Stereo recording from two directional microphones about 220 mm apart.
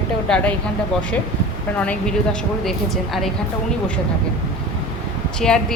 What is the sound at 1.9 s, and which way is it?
Speech, 5° left (ahead or behind).